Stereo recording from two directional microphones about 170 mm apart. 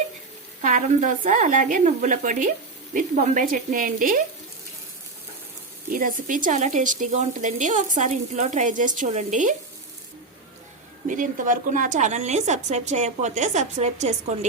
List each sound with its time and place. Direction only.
0.6 s a woman's voice: 50° right (ahead or behind)
5.9 s a woman's voice: 55° right (ahead or behind)
11.1 s a woman's voice: 50° right (ahead or behind)